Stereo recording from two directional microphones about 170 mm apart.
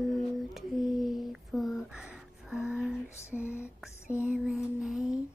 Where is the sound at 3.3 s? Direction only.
10° right (ahead or behind).